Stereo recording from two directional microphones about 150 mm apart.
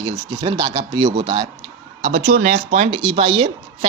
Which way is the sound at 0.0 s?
30° right (ahead or behind).